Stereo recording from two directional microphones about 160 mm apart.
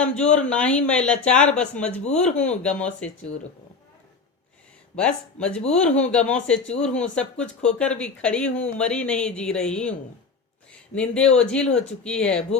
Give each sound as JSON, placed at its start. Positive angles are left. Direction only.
{"t": 0.2, "sound": "speech", "side_deg": 5}
{"t": 2.0, "sound": "speech", "side_deg": 45}
{"t": 2.3, "sound": "speech", "side_deg": 10}
{"t": 4.9, "sound": "speech", "side_deg": 5}
{"t": 10.7, "sound": "a sound", "side_deg": 5}
{"t": 11.3, "sound": "speech", "side_deg": 5}